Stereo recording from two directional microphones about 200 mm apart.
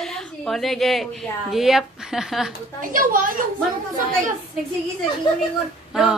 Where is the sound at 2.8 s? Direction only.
40° right (ahead or behind).